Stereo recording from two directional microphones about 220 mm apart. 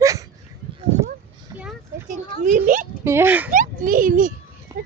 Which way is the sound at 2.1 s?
35° right (ahead or behind).